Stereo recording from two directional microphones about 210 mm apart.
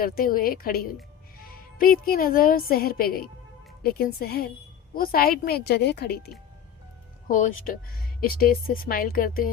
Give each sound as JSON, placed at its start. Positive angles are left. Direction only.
{"t": 0.0, "sound": "a woman's voice", "side_deg": 45}
{"t": 7.3, "sound": "a woman's voice", "side_deg": 40}